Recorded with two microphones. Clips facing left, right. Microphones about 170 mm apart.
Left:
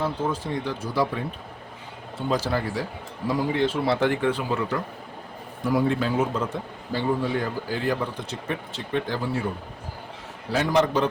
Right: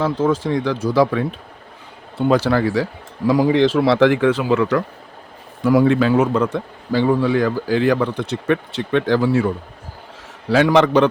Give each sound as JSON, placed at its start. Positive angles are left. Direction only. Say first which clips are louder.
{"t": 0.0, "sound": "a man's voice", "louder": "right 8 dB", "side_deg": -90}
{"t": 2.1, "sound": "a man's voice", "louder": "right 9 dB", "side_deg": -65}
{"t": 10.5, "sound": "a man's voice", "louder": "right 8 dB", "side_deg": -90}